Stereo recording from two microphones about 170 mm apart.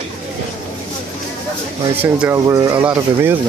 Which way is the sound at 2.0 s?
10° right (ahead or behind).